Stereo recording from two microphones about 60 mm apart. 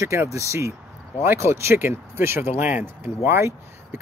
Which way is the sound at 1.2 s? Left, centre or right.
Right.